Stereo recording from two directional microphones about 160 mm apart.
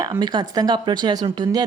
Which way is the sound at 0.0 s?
25° right (ahead or behind).